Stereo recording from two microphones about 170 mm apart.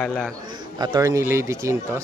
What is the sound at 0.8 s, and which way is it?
Speech, 20° right (ahead or behind).